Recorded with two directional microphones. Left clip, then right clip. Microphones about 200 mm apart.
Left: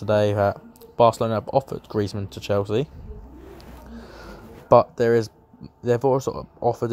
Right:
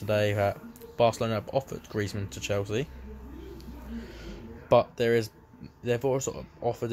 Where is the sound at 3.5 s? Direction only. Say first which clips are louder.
Left 2 dB; 20° left (ahead or behind).